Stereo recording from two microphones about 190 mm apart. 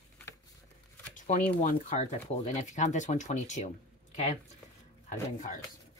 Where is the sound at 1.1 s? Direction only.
40° left (ahead or behind).